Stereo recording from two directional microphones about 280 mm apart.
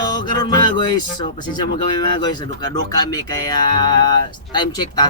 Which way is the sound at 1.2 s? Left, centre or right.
Centre.